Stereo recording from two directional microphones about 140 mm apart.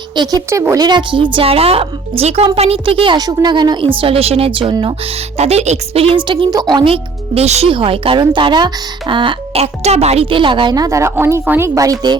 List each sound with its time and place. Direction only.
0.2 s speech: 25° right (ahead or behind)
5.4 s speech: 50° right (ahead or behind)
7.7 s speech: 40° right (ahead or behind)